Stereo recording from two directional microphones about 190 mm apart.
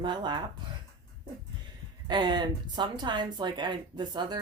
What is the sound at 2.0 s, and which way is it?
Speech, 25° right (ahead or behind).